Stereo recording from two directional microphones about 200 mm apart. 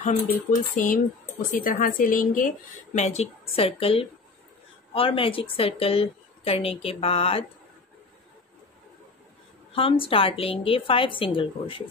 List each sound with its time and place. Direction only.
0.3 s a woman's voice: 45° left (ahead or behind); by 7.4 s 30° left (ahead or behind)
9.7 s speech: 25° left (ahead or behind)